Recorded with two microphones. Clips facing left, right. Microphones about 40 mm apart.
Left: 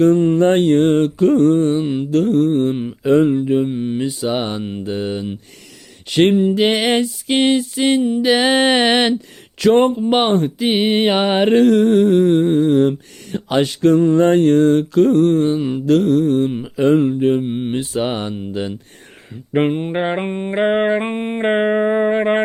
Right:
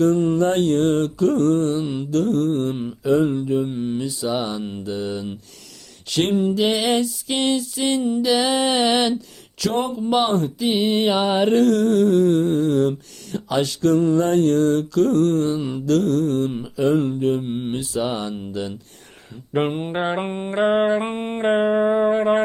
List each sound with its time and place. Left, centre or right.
0.0 s mantra: left
3.0 s mantra: left
3.7 s mantra: left
4.6 s mantra: left
4.9 s mantra: left
8.2 s music: left
10.3 s mantra: left
16.7 s mantra: left
17.4 s mantra: left
17.7 s mantra: left
19.5 s mantra: centre; by 22.4 s left